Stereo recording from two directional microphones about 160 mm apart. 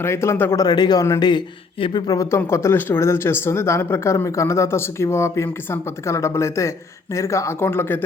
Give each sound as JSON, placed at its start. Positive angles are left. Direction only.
{"t": 0.0, "sound": "a man's voice", "side_deg": 15}